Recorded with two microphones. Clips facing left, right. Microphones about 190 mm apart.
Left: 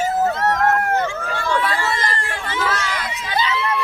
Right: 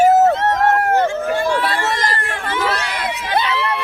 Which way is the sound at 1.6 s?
45° right (ahead or behind).